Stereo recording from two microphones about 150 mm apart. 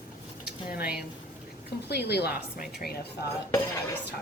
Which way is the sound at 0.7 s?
90° left.